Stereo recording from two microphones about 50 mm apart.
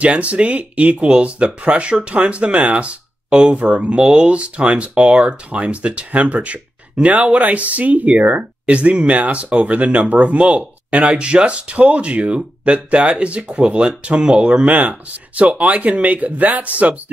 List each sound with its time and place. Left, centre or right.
0.0 s speech: right